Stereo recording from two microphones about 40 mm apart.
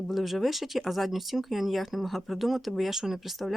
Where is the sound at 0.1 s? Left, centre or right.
Centre.